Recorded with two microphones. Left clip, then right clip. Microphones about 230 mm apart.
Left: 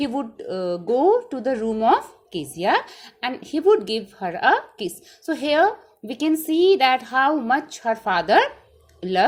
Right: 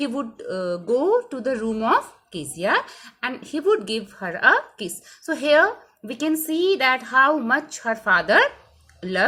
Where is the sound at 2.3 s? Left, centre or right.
Centre.